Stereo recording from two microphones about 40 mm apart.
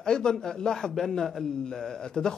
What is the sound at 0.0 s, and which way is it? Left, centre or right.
Speech, centre.